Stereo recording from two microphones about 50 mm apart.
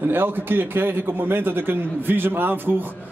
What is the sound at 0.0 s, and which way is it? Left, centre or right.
A man's voice, right.